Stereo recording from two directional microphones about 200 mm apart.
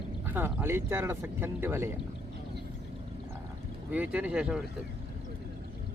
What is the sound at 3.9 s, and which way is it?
Speech, 5° right (ahead or behind).